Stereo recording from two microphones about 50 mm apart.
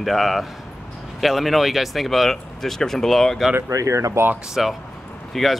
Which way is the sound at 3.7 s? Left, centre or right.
Right.